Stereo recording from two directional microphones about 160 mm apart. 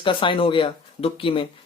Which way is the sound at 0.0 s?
30° left (ahead or behind).